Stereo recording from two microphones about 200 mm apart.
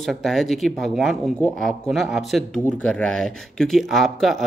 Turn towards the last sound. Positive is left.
turn(degrees=0)  # may be behind; listen again after turning